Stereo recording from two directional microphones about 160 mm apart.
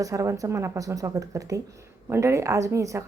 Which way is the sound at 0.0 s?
20° right (ahead or behind).